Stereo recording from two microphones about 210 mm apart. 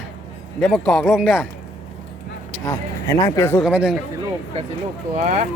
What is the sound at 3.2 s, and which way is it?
Speech, 15° left (ahead or behind).